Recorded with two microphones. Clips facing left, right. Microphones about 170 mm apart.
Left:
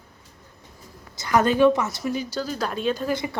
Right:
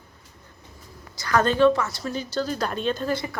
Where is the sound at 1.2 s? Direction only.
20° left (ahead or behind).